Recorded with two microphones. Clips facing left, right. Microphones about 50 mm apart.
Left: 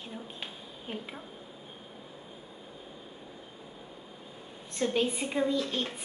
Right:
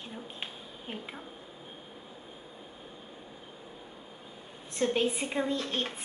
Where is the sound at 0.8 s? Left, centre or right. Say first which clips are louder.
Left 2 dB; centre.